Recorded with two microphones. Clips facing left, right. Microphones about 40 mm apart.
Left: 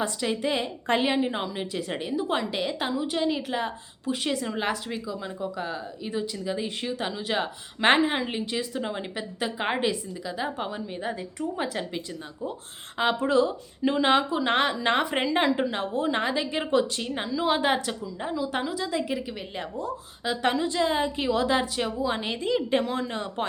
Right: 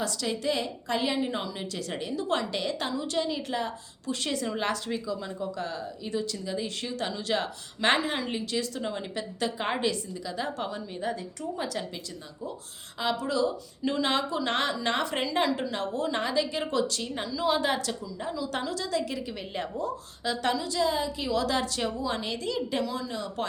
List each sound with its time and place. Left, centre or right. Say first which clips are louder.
0.0 s a woman's voice: left 3 dB; left
13.0 s a woman's voice: left 5 dB; left; by 19.4 s centre
19.5 s speech: right 2 dB; centre
20.2 s a woman's voice: left 3 dB; centre
20.5 s a woman's voice: left 2 dB; left